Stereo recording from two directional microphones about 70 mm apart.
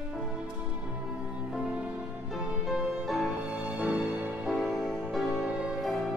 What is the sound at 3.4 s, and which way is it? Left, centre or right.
Music, centre.